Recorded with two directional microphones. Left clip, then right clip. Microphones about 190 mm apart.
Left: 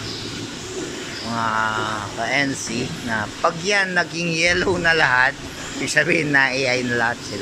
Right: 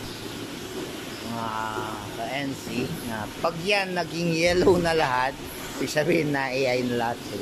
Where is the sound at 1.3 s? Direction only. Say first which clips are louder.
Left 9 dB; 5° right (ahead or behind).